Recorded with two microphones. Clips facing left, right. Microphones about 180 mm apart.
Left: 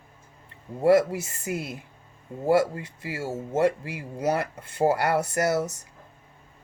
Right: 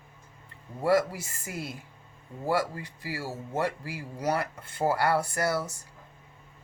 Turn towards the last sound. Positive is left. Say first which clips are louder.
# left 4 dB
turn(degrees=20)  # may be behind; listen again after turning